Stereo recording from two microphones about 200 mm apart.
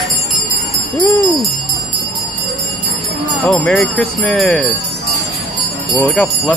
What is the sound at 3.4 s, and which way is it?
Speech, centre (ahead or behind).